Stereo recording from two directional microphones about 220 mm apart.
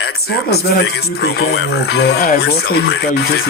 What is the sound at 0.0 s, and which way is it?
Speech, 45° left (ahead or behind).